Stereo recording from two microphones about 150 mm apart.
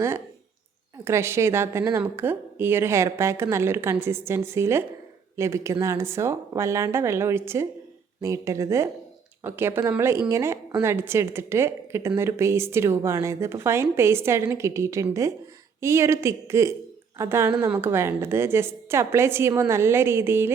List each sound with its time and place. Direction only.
1.0 s a woman's voice: 15° right (ahead or behind)